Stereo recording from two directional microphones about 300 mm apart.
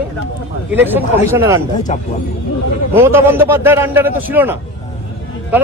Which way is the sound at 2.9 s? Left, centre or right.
Centre.